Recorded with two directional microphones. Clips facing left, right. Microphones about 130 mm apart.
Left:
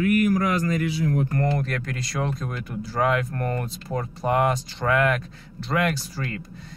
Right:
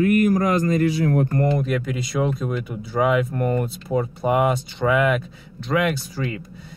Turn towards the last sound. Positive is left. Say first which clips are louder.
# right 4 dB
turn(degrees=0)  # may be behind; listen again after turning